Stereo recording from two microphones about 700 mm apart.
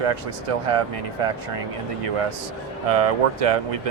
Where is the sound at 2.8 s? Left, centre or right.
Right.